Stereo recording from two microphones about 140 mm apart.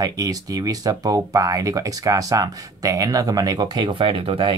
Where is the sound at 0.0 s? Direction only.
25° right (ahead or behind).